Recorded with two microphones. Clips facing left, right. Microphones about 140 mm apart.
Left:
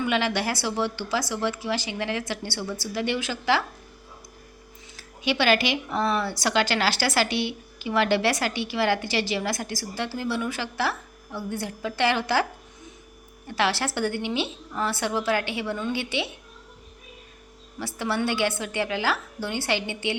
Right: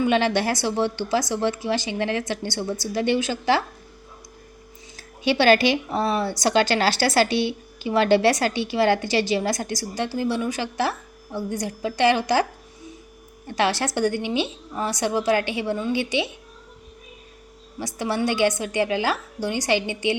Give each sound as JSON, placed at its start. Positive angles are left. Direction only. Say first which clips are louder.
{"t": 0.0, "sound": "speech", "louder": "right 5 dB", "side_deg": -25}
{"t": 5.3, "sound": "a woman's voice", "louder": "right 5 dB", "side_deg": -30}
{"t": 9.7, "sound": "a woman's voice", "louder": "right 4 dB", "side_deg": -15}
{"t": 13.6, "sound": "a woman's voice", "louder": "right 3 dB", "side_deg": -20}
{"t": 17.7, "sound": "a woman's voice", "louder": "right 2 dB", "side_deg": -15}